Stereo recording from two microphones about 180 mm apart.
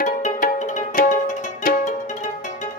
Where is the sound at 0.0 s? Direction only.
50° left (ahead or behind).